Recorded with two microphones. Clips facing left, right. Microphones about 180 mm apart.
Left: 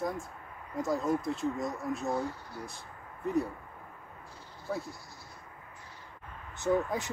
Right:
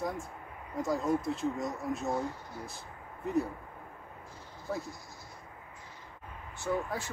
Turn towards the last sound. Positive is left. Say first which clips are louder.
# left 4 dB
turn(degrees=20)  # may be behind; listen again after turning